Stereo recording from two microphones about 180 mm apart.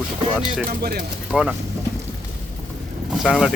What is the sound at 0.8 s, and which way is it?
Speech, 60° right (ahead or behind).